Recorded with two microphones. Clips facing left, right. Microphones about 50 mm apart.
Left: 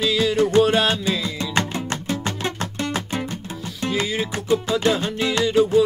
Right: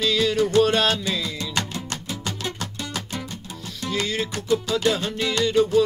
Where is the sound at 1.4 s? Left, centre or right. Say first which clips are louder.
Left 5 dB; left.